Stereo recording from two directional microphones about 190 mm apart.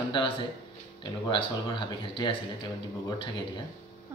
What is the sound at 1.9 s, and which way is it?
Speech, 25° left (ahead or behind).